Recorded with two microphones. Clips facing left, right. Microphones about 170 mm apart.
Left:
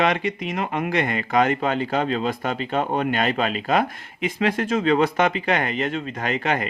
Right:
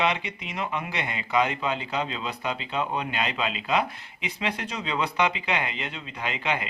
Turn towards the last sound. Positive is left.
turn(degrees=50)  # may be behind; listen again after turning